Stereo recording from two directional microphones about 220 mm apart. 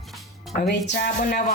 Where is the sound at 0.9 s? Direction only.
35° left (ahead or behind).